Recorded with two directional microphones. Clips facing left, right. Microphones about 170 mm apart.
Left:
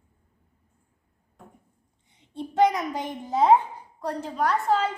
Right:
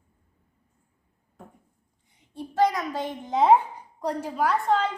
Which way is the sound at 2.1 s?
25° left (ahead or behind).